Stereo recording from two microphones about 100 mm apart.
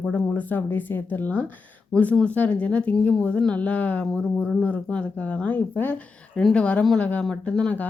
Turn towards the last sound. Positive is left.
turn(degrees=15)  # may be behind; listen again after turning